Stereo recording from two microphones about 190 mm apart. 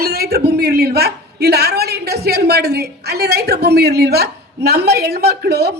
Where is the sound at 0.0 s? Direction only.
55° right (ahead or behind).